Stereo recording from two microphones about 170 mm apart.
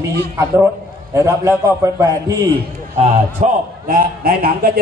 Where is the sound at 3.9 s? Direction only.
60° right (ahead or behind).